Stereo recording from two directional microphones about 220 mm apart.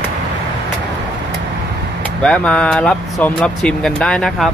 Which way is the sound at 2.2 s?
5° left (ahead or behind).